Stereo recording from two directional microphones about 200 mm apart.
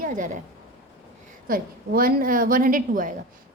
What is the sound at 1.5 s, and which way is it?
A woman's voice, 45° right (ahead or behind).